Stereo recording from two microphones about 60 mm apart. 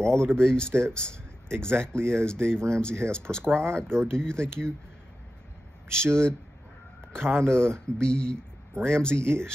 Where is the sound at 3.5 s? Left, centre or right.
Right.